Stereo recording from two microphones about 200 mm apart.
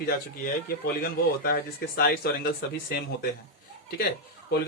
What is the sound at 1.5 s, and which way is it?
Speech, 50° left (ahead or behind).